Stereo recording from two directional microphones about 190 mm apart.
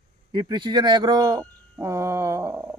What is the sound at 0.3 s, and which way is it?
Speech, 25° right (ahead or behind).